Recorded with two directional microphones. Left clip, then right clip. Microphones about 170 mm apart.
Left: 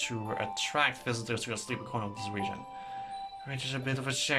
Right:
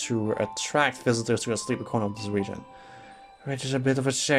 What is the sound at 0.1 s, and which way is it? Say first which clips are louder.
Speech: right 7 dB; 35° right (ahead or behind).